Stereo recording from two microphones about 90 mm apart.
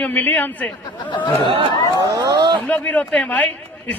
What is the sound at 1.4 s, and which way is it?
Speech, 75° right (ahead or behind).